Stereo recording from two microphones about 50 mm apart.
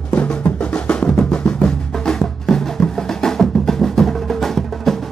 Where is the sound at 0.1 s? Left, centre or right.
Left.